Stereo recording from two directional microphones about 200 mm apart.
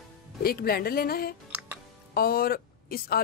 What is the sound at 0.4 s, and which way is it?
Speech, 50° left (ahead or behind).